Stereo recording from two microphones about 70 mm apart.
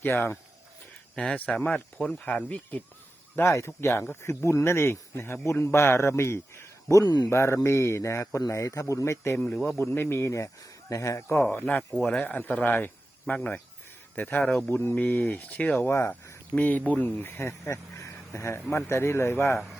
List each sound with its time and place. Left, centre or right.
0.0 s speech: left
1.6 s speech: centre
3.3 s speech: left
7.0 s speech: left
7.3 s speech: left
9.6 s speech: left
11.5 s speech: left
11.9 s speech: centre; by 14.9 s left
14.9 s speech: left
15.9 s speech: left
16.6 s speech: left